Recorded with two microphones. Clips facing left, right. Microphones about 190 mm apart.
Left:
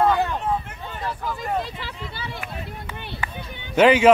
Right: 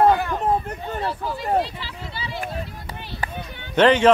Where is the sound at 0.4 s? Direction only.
40° right (ahead or behind).